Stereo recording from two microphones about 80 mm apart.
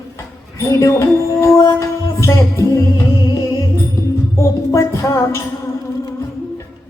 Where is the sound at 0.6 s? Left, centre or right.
Left.